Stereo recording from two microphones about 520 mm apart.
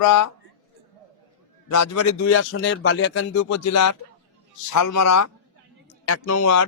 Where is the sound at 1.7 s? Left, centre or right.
Left.